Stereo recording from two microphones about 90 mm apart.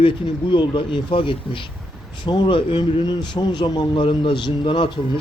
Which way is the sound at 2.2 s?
60° left (ahead or behind).